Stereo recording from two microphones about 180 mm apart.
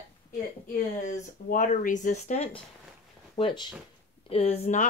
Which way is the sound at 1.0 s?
45° left (ahead or behind).